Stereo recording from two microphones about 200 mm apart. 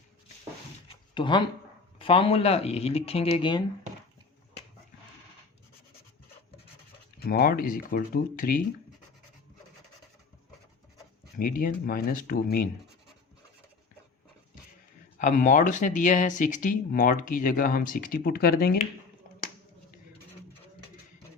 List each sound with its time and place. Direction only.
0.9 s a sound: 25° left (ahead or behind)
2.0 s speech: 25° left (ahead or behind)
7.2 s speech: 50° left (ahead or behind)
11.3 s speech: 45° left (ahead or behind)
15.2 s speech: 40° left (ahead or behind)